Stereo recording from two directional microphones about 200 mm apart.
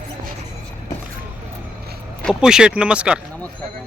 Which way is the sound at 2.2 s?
5° right (ahead or behind).